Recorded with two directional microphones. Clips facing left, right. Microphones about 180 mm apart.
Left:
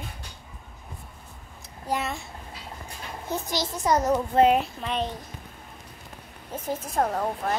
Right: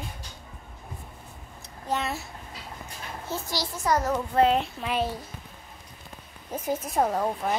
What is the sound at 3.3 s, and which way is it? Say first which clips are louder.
A child's voice: left 3 dB; 20° left (ahead or behind).